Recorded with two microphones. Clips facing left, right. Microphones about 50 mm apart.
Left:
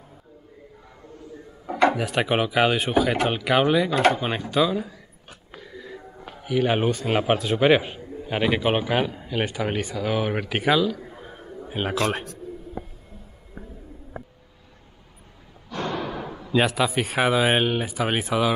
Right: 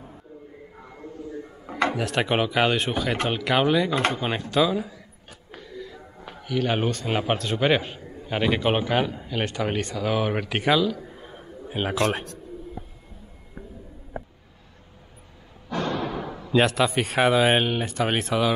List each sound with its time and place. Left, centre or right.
1.9 s speech: centre
5.5 s music: centre
6.4 s a man's voice: centre
16.0 s speech: centre